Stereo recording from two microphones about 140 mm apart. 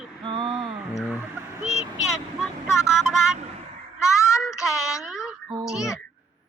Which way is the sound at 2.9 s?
5° right (ahead or behind).